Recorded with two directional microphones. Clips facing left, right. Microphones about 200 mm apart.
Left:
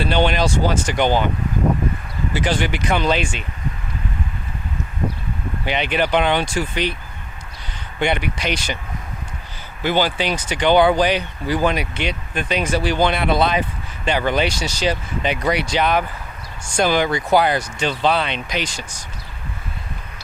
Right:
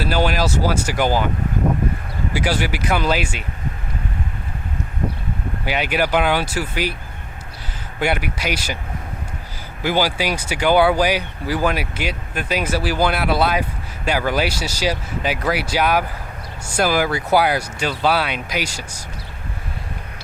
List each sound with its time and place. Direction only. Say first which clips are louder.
0.0 s speech: left 1 dB; 5° right (ahead or behind)
2.3 s speech: left 1 dB; 10° right (ahead or behind)
5.6 s speech: even; 5° right (ahead or behind)
7.9 s speech: left 1 dB; 5° right (ahead or behind)
9.8 s speech: even; 10° right (ahead or behind)